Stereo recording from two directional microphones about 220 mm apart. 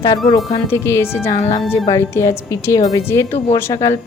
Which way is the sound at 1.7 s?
10° left (ahead or behind).